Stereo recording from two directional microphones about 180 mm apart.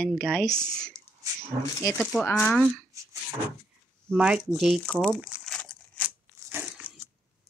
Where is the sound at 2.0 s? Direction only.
10° left (ahead or behind).